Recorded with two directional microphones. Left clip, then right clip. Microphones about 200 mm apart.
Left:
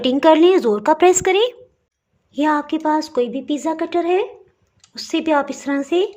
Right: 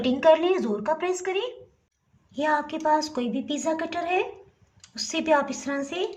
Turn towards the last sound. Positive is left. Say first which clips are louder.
# left 10 dB
turn(degrees=45)  # may be behind; listen again after turning